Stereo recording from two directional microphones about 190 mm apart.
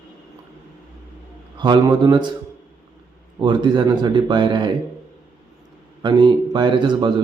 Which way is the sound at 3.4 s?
25° right (ahead or behind).